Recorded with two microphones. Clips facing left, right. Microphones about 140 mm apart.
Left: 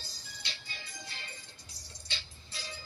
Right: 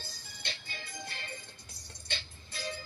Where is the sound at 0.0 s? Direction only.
50° right (ahead or behind).